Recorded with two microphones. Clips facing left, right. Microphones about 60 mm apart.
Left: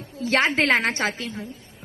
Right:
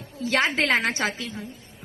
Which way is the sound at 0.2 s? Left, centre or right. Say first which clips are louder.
Left 2 dB; left.